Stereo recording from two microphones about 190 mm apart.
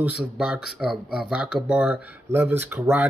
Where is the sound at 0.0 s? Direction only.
5° right (ahead or behind).